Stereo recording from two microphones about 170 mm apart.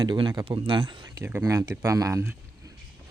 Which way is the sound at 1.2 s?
15° right (ahead or behind).